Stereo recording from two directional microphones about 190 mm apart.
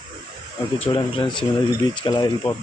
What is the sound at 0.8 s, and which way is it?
Speech, 25° left (ahead or behind).